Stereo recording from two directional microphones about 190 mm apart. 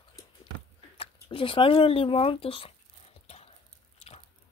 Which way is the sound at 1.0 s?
30° left (ahead or behind).